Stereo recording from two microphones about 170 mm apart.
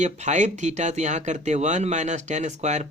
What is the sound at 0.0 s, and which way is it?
Speech, 45° right (ahead or behind).